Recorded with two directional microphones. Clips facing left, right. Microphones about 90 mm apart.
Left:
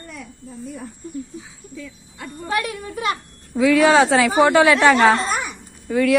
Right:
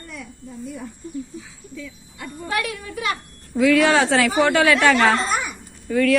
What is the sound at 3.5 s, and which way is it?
Speech, 20° left (ahead or behind).